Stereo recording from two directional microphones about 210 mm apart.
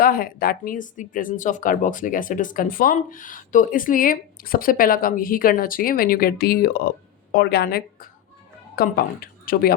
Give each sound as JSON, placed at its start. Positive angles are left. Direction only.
{"t": 0.0, "sound": "a woman's voice", "side_deg": 45}